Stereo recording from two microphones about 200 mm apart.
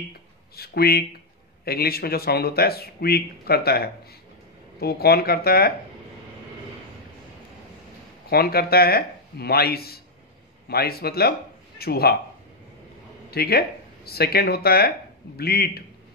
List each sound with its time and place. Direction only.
0.6 s speech: 50° left (ahead or behind)
8.3 s speech: 50° left (ahead or behind)
13.3 s speech: 50° left (ahead or behind)